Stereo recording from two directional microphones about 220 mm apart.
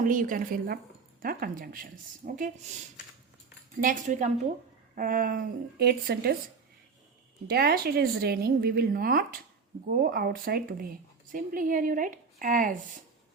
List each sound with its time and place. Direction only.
0.0 s a woman's voice: 35° right (ahead or behind)
3.8 s a woman's voice: 35° right (ahead or behind)
7.4 s a woman's voice: 45° right (ahead or behind)